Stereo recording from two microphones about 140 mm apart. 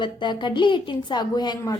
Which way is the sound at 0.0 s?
35° left (ahead or behind).